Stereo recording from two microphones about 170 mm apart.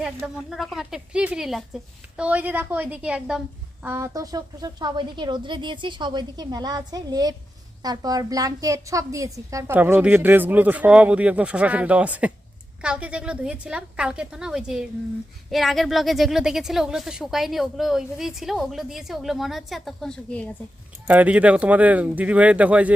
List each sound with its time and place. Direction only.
0.0 s a woman's voice: 5° right (ahead or behind)
3.8 s a woman's voice: 15° right (ahead or behind); by 20.5 s 5° left (ahead or behind)
21.1 s a woman's voice: 10° right (ahead or behind)